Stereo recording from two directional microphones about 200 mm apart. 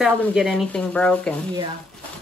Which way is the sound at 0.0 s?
Centre (ahead or behind).